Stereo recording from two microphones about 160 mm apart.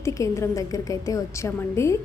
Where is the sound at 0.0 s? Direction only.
20° left (ahead or behind).